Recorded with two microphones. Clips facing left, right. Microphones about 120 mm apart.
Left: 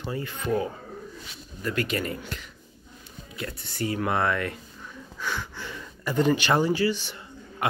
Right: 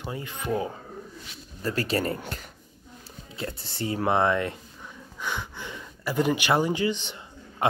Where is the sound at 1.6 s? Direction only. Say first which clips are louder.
Right 1 dB; 35° right (ahead or behind).